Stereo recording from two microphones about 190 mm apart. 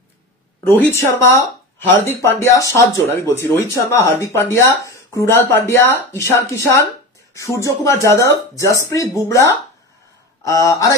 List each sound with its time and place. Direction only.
0.7 s speech: 10° left (ahead or behind)